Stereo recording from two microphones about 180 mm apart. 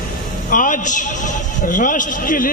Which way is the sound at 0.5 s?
45° left (ahead or behind).